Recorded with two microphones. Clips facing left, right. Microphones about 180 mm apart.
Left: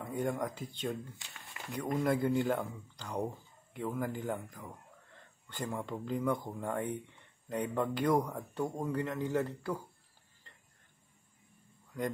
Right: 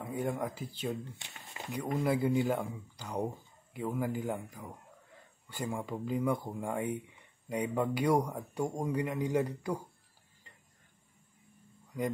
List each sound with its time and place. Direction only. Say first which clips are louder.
0.0 s speech: even; 5° right (ahead or behind)
1.1 s speech: right 3 dB; 25° right (ahead or behind)
1.7 s speech: even; 10° right (ahead or behind)